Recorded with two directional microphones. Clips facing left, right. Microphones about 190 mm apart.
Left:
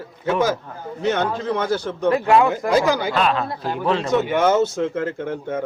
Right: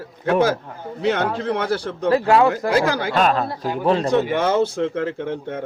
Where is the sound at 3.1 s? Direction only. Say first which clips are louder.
Right 2 dB; 40° right (ahead or behind).